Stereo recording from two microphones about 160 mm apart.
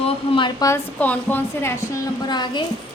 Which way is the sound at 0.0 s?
30° left (ahead or behind).